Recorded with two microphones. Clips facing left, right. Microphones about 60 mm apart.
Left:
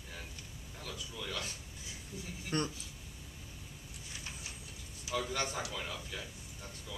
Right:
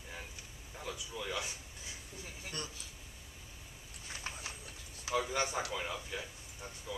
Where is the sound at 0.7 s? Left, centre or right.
Centre.